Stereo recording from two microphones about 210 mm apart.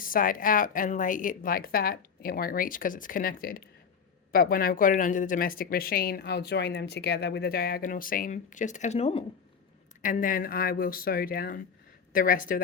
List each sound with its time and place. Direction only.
0.0 s speech: 40° left (ahead or behind)